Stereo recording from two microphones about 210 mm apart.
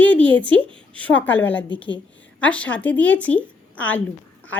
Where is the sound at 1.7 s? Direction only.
25° left (ahead or behind).